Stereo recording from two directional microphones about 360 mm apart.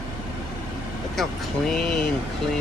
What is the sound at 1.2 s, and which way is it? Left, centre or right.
Speech, centre.